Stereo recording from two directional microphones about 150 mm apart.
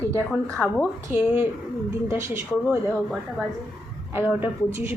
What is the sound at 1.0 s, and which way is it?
A woman's voice, 15° right (ahead or behind).